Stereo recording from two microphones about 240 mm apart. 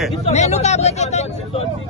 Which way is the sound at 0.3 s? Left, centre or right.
Left.